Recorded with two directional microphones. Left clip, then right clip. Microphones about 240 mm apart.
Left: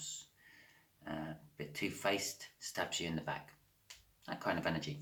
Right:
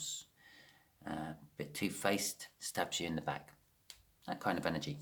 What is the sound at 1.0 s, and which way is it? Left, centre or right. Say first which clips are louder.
Speech: right 1 dB; right.